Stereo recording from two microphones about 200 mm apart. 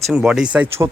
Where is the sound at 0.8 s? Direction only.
15° right (ahead or behind).